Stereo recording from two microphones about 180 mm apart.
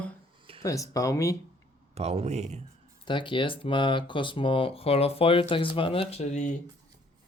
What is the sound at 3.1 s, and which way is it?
Speech, 25° left (ahead or behind).